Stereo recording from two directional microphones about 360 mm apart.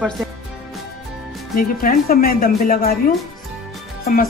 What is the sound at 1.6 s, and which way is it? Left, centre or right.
Speech, left.